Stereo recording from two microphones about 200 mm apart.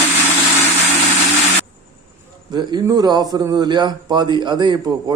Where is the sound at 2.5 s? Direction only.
20° right (ahead or behind).